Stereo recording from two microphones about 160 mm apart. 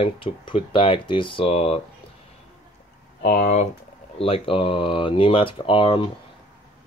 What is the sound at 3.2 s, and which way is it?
Speech, 50° left (ahead or behind).